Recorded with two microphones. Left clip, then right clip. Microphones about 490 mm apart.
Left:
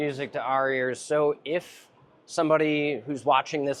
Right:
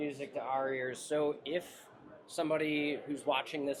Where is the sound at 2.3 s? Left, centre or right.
Left.